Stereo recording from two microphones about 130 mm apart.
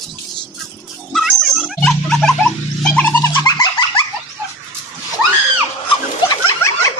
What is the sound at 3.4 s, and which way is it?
Dog, 30° left (ahead or behind).